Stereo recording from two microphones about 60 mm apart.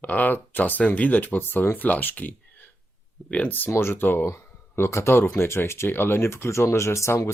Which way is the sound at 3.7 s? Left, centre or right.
Left.